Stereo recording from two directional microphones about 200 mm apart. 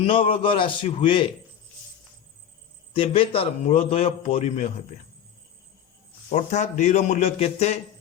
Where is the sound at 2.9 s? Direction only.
25° left (ahead or behind).